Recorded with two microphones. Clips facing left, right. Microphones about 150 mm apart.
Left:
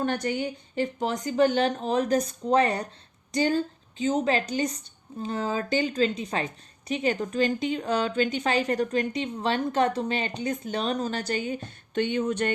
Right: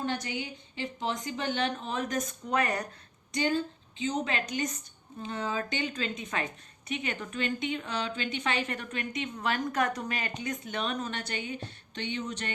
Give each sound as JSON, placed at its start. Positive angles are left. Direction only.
{"t": 0.0, "sound": "a woman's voice", "side_deg": 55}